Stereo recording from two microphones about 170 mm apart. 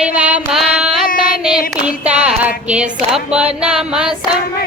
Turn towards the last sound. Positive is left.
turn(degrees=-5)  # may be behind; listen again after turning